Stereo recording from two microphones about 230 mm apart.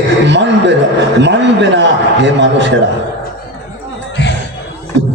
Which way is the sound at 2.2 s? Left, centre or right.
Right.